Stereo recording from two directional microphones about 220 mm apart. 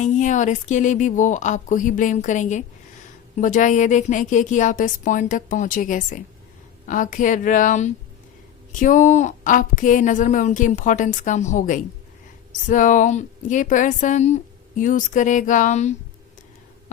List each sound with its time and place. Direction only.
0.0 s a woman's voice: 35° left (ahead or behind)